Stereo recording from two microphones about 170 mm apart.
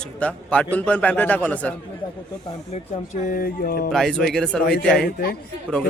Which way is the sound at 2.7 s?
45° left (ahead or behind).